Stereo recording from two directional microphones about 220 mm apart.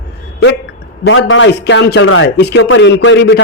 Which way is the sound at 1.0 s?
60° left (ahead or behind).